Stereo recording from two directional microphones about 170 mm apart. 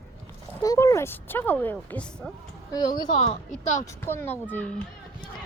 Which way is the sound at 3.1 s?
45° left (ahead or behind).